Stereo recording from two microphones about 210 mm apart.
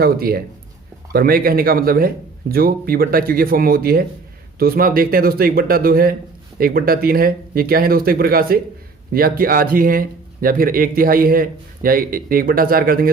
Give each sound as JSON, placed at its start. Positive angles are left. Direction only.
{"t": 0.0, "sound": "a man's voice", "side_deg": -45}